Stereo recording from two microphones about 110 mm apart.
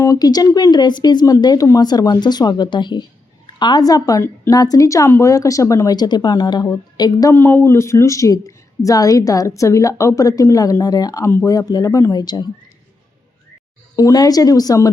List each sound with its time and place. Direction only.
0.0 s a woman's voice: 35° left (ahead or behind)
7.3 s a woman's voice: 20° left (ahead or behind); by 12.5 s 40° left (ahead or behind)
13.9 s speech: 35° left (ahead or behind)